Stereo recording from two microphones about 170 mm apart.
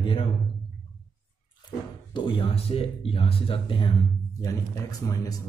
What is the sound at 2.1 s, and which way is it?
Speech, 30° left (ahead or behind).